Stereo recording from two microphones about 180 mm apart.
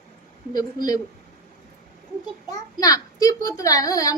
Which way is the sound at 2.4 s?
20° left (ahead or behind).